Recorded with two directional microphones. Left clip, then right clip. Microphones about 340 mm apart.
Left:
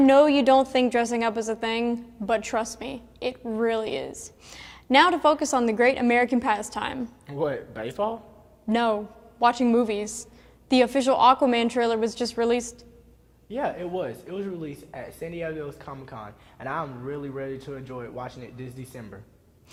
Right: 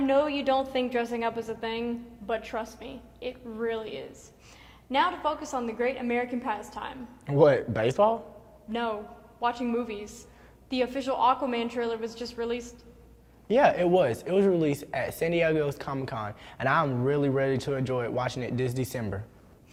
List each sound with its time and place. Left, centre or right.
0.1 s a woman's voice: left
7.3 s speech: right
8.7 s a woman's voice: left
13.5 s speech: right